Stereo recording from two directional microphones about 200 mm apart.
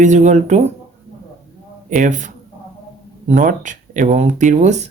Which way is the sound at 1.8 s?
40° right (ahead or behind).